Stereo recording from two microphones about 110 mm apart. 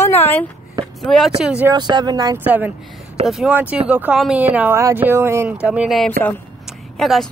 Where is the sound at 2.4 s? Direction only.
15° right (ahead or behind).